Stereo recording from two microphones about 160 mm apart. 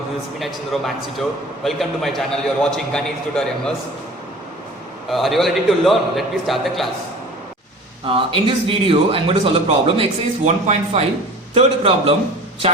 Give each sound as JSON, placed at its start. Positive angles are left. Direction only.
{"t": 0.3, "sound": "a man's voice", "side_deg": 0}
{"t": 5.0, "sound": "a man's voice", "side_deg": 0}
{"t": 8.0, "sound": "speech", "side_deg": -35}